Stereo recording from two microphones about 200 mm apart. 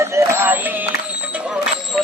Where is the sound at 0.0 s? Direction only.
15° right (ahead or behind).